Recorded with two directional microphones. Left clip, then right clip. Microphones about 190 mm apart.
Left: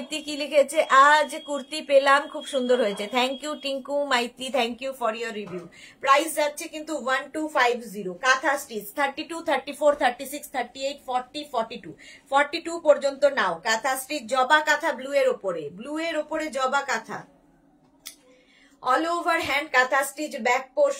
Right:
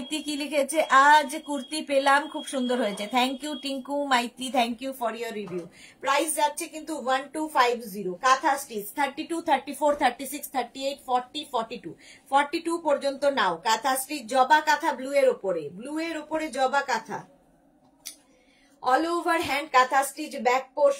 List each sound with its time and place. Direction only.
0.1 s a woman's voice: 10° left (ahead or behind)
18.9 s a woman's voice: 20° left (ahead or behind)